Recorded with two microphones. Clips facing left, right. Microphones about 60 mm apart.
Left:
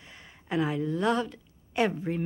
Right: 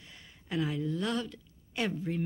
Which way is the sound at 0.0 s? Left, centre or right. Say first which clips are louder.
Left 4 dB; left.